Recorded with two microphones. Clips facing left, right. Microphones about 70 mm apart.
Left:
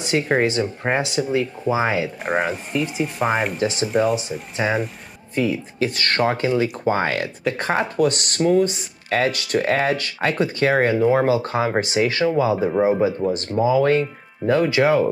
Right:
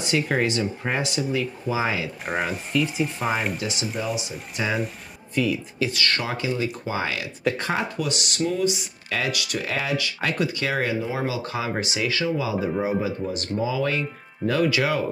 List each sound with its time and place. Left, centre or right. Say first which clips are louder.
0.0 s speech: left 4 dB; left
2.2 s speech: left 3 dB; centre
3.5 s speech: left 7 dB; left
3.9 s speech: left 11 dB; left
4.6 s speech: left 4 dB; left
12.6 s speech: left 7 dB; left